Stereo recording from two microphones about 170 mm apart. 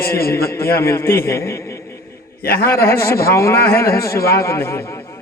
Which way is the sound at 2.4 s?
60° left (ahead or behind).